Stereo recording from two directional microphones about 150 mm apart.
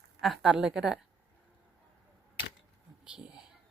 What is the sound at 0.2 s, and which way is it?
Speech, centre (ahead or behind).